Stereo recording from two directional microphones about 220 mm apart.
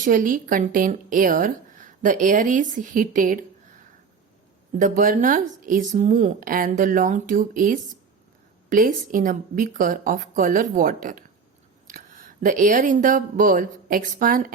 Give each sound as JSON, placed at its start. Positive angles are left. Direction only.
{"t": 0.0, "sound": "speech", "side_deg": -35}
{"t": 4.8, "sound": "speech", "side_deg": -35}